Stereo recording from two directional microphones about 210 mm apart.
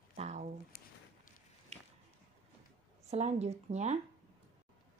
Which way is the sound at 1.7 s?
30° right (ahead or behind).